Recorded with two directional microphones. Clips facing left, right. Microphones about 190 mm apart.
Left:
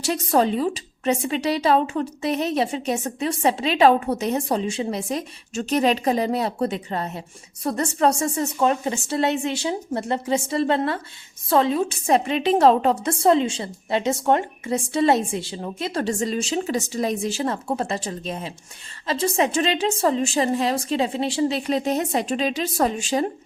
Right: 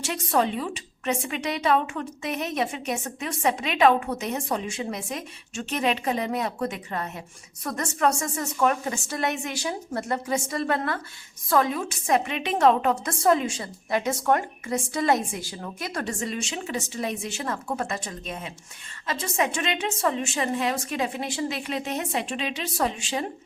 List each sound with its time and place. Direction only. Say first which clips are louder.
0.0 s a woman's voice: left 4 dB; 35° left (ahead or behind)